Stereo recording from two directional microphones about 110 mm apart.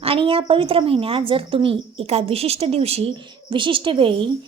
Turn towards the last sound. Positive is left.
turn(degrees=-50)  # may be behind; listen again after turning